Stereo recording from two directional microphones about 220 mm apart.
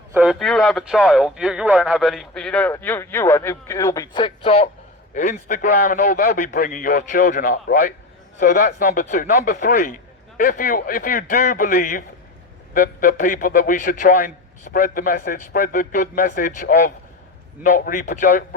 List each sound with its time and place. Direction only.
0.1 s a man's voice: 5° right (ahead or behind); by 18.4 s 40° left (ahead or behind)